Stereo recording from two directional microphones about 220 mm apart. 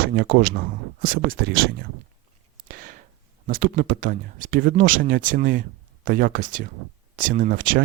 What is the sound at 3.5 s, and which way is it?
Speech, 40° right (ahead or behind).